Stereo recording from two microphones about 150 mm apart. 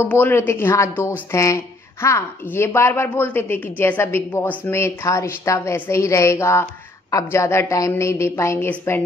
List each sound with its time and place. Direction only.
0.0 s a woman's voice: 15° left (ahead or behind)